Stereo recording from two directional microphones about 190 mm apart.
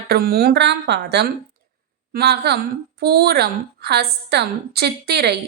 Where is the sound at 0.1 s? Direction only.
55° right (ahead or behind).